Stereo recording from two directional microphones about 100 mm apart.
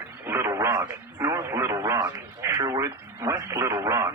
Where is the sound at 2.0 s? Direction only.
30° right (ahead or behind).